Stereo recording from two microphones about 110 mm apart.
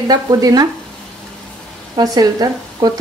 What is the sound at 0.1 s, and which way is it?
Speech, 35° right (ahead or behind).